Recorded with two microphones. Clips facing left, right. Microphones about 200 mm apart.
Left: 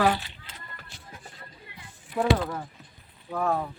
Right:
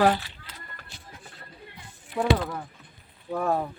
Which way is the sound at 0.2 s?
20° left (ahead or behind).